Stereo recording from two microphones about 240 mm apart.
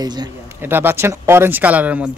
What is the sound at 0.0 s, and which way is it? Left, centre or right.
A man's voice, centre.